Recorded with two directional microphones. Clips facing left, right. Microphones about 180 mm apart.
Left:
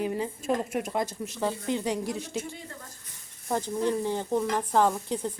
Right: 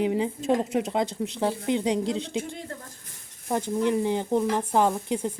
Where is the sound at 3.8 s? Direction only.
15° right (ahead or behind).